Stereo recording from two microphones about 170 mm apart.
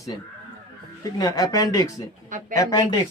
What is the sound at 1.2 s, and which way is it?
Speech, 20° left (ahead or behind).